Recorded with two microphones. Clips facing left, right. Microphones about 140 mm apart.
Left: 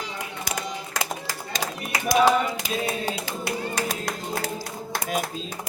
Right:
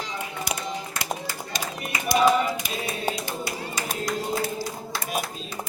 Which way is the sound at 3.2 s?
75° left (ahead or behind).